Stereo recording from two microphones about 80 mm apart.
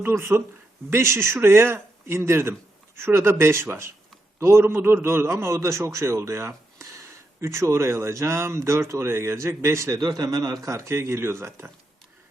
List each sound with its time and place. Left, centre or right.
0.0 s speech: right
10.0 s speech: right